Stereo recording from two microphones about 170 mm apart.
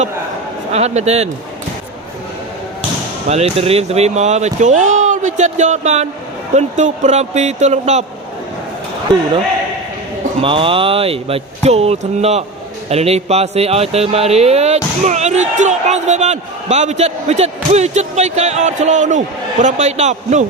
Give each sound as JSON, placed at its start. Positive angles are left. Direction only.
{"t": 0.7, "sound": "speech", "side_deg": -40}
{"t": 3.2, "sound": "speech", "side_deg": -40}
{"t": 10.4, "sound": "speech", "side_deg": -30}